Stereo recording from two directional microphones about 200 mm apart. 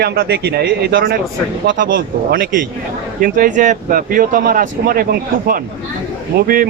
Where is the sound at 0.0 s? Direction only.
50° right (ahead or behind).